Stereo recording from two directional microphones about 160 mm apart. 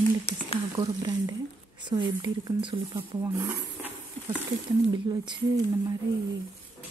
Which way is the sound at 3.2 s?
15° right (ahead or behind).